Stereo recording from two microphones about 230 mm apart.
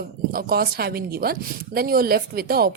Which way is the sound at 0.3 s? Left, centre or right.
Right.